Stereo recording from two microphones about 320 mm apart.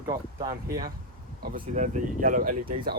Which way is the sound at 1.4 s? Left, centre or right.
Right.